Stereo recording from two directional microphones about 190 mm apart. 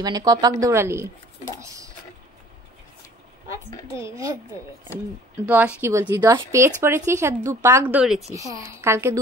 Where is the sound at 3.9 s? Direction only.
15° right (ahead or behind).